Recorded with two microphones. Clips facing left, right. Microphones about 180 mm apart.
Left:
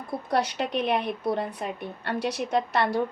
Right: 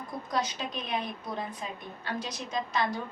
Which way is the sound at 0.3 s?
65° left (ahead or behind).